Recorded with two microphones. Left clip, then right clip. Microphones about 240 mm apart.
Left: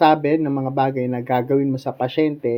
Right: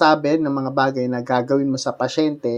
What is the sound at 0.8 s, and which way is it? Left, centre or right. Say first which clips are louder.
Speech: right 1 dB; centre.